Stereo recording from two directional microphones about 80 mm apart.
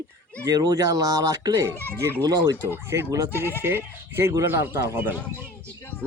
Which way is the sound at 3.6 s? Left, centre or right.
Right.